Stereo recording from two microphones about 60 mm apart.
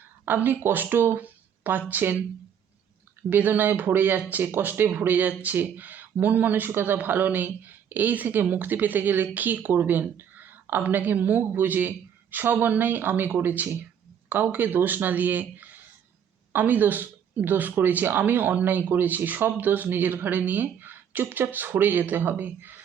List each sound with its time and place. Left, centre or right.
0.3 s speech: right
3.2 s speech: right